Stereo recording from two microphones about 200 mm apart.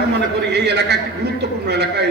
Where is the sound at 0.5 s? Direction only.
55° right (ahead or behind).